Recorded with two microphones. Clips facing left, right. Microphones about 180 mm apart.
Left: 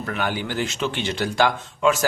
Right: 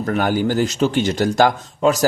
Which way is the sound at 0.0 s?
40° right (ahead or behind).